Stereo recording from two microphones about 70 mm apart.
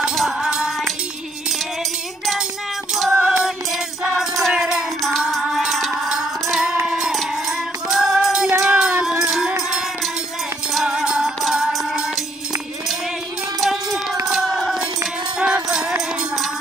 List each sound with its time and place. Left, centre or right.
0.1 s music: centre
3.2 s music: centre
4.2 s music: centre
6.9 s a sound: centre
7.9 s music: centre
11.0 s music: centre
14.2 s a sound: centre
15.3 s music: centre